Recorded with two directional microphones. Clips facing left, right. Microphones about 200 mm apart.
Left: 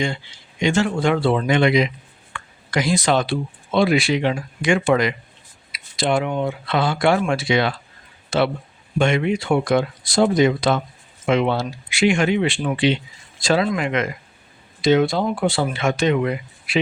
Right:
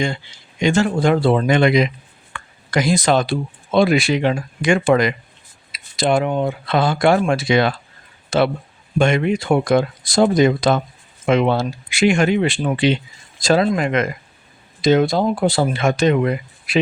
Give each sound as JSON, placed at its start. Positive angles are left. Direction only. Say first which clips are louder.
{"t": 0.6, "sound": "speech", "louder": "right 2 dB", "side_deg": -40}
{"t": 9.0, "sound": "speech", "louder": "right 2 dB", "side_deg": -45}